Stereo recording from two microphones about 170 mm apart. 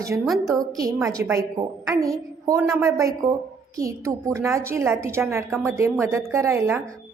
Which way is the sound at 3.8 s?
15° right (ahead or behind).